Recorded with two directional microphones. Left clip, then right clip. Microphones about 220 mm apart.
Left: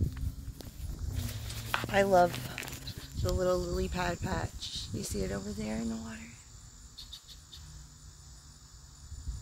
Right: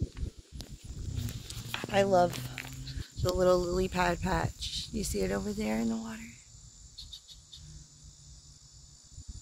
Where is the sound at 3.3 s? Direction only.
35° right (ahead or behind).